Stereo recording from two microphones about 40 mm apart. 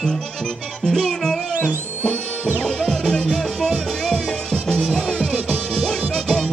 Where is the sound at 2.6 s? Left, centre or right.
Centre.